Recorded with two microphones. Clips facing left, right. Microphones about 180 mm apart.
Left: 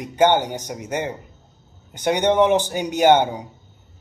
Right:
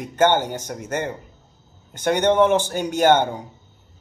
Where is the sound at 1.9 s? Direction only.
15° left (ahead or behind).